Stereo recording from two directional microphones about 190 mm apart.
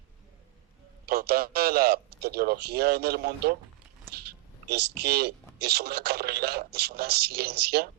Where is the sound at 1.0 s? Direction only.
50° right (ahead or behind).